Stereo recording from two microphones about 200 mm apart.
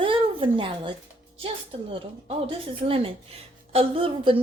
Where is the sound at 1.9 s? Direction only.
25° right (ahead or behind).